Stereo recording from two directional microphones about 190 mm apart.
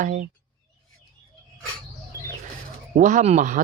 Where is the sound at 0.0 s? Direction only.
45° right (ahead or behind).